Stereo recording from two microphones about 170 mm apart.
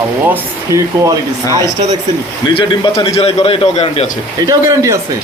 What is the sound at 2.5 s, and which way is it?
A man's voice, 30° left (ahead or behind).